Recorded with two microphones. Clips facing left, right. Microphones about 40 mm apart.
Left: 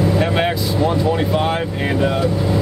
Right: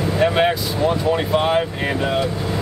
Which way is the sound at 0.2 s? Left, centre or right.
Centre.